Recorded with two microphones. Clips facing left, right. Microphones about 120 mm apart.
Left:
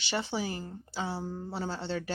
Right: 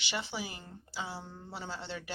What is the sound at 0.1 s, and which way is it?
A woman's voice, 40° left (ahead or behind).